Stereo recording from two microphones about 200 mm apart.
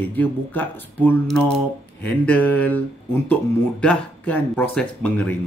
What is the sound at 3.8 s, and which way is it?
Speech, 5° left (ahead or behind).